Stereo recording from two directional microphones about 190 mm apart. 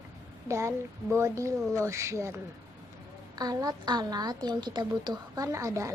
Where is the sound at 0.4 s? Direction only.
15° right (ahead or behind).